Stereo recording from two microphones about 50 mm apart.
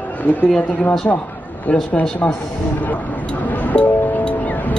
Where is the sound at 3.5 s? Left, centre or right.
Left.